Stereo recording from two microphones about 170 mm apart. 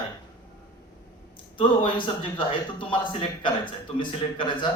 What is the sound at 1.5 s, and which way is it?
A man's voice, 30° left (ahead or behind).